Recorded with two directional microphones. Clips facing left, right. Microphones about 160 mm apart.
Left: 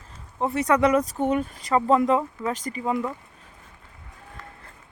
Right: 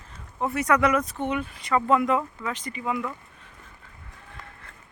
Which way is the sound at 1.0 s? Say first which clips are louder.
Left 4 dB; 40° left (ahead or behind).